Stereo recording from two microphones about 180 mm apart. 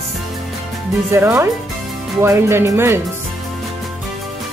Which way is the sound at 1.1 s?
15° right (ahead or behind).